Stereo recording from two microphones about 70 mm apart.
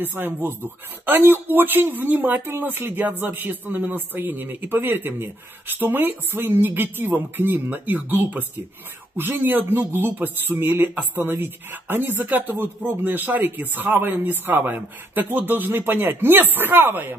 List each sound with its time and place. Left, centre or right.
0.0 s speech: right